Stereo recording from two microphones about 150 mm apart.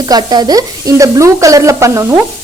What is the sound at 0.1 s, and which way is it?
A woman's voice, 25° right (ahead or behind).